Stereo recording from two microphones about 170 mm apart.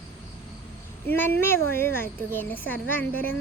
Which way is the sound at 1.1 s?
10° left (ahead or behind).